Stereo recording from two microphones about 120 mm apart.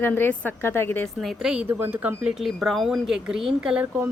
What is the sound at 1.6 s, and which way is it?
Speech, 20° right (ahead or behind).